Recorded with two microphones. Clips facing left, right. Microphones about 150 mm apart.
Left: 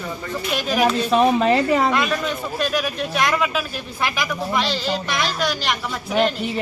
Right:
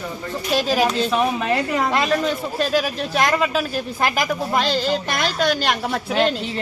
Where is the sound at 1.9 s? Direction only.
30° right (ahead or behind); by 6.0 s 55° right (ahead or behind).